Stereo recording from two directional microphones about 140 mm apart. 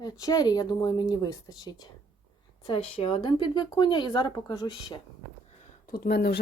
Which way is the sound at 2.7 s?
45° left (ahead or behind).